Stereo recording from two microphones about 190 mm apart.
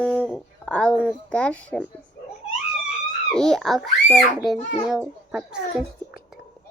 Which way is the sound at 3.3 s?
5° left (ahead or behind).